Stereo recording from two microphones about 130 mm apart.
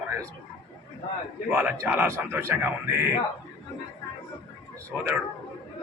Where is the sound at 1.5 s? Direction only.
15° right (ahead or behind).